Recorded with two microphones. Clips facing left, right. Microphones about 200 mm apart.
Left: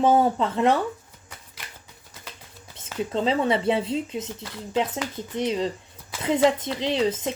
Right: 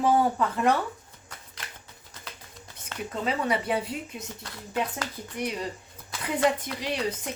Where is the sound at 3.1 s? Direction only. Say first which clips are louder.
Left 5 dB; 25° left (ahead or behind).